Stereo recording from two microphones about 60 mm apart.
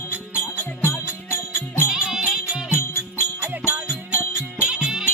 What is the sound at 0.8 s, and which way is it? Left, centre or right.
Music, left.